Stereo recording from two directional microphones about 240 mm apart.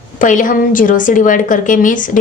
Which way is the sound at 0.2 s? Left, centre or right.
Left.